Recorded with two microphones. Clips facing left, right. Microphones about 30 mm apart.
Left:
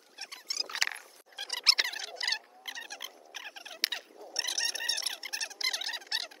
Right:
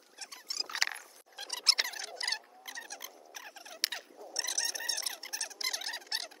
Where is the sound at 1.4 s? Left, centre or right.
Left.